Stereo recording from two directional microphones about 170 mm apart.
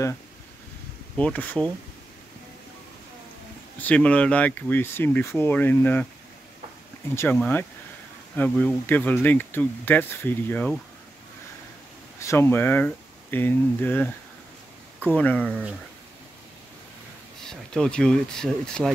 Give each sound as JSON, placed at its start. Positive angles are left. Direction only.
{"t": 1.1, "sound": "speech", "side_deg": 10}
{"t": 3.8, "sound": "speech", "side_deg": 5}
{"t": 7.3, "sound": "speech", "side_deg": 10}
{"t": 12.2, "sound": "speech", "side_deg": 15}
{"t": 17.5, "sound": "speech", "side_deg": 5}